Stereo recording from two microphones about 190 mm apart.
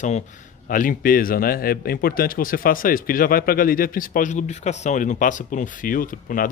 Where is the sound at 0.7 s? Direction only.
45° left (ahead or behind).